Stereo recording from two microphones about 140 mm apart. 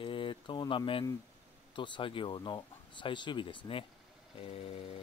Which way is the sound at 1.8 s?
35° left (ahead or behind).